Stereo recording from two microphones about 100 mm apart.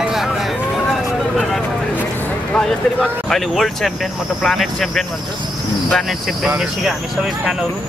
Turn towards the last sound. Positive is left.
turn(degrees=-5)  # may be behind; listen again after turning